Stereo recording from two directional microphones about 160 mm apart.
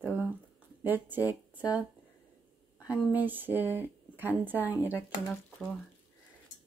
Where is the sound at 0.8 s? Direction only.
10° right (ahead or behind).